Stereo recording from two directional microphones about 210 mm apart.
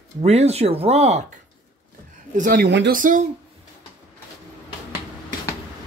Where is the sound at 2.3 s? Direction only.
40° right (ahead or behind).